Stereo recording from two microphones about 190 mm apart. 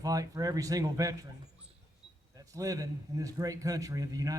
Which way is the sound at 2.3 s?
20° right (ahead or behind).